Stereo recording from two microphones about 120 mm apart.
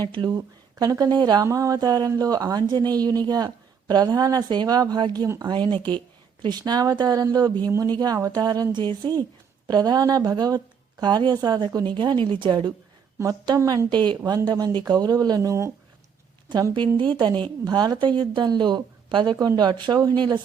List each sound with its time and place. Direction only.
0.0 s speech: 35° right (ahead or behind)
6.4 s a woman's voice: 35° right (ahead or behind)
16.5 s speech: 35° right (ahead or behind)